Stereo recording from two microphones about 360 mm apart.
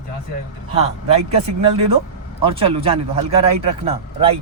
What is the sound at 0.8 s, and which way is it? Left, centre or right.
Speech, centre.